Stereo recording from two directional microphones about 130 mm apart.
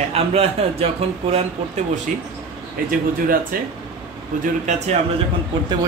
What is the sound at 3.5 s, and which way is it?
Speech, 90° right.